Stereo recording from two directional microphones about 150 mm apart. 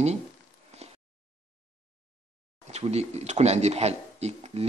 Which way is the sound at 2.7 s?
45° right (ahead or behind).